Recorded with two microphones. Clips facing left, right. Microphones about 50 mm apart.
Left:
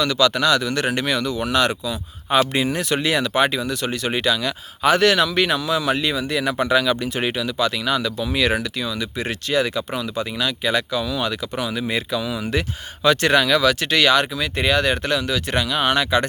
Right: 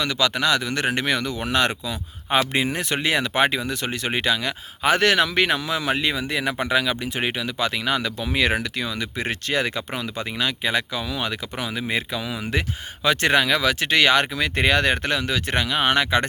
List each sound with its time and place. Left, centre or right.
0.0 s speech: right
14.3 s speech: right